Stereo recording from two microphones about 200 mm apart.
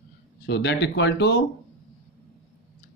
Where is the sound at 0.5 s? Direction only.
55° left (ahead or behind).